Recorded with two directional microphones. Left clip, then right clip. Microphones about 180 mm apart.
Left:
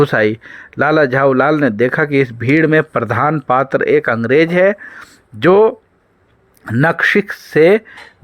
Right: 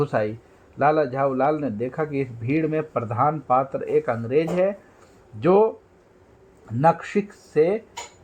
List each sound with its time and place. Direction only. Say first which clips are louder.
0.0 s speech: left 11 dB; 45° left (ahead or behind)